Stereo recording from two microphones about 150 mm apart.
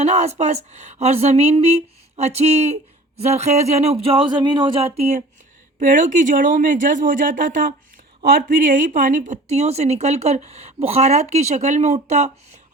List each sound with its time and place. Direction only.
0.0 s speech: 45° right (ahead or behind)
4.9 s speech: 50° right (ahead or behind)
5.8 s speech: 60° right (ahead or behind)